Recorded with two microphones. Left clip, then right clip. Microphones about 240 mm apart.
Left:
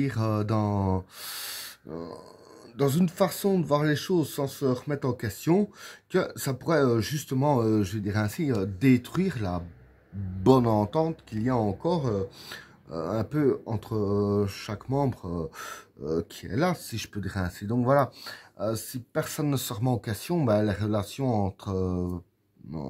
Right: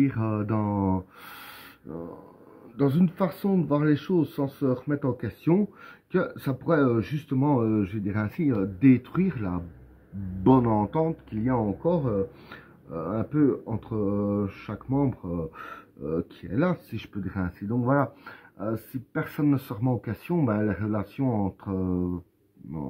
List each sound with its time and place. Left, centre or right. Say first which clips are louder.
0.0 s speech: right 2 dB; left
2.8 s speech: left 1 dB; left